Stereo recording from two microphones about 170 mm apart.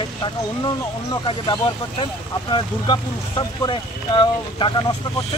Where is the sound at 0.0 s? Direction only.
25° left (ahead or behind).